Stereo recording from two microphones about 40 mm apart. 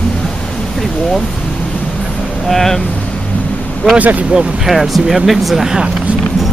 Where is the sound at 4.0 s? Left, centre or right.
Right.